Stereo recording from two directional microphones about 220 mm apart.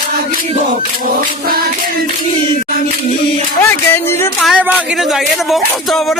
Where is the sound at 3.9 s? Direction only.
10° left (ahead or behind).